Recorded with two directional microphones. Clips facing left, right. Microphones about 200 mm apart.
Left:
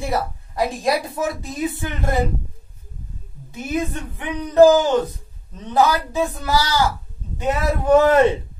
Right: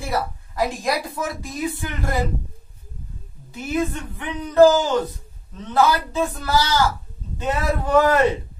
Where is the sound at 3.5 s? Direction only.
20° left (ahead or behind).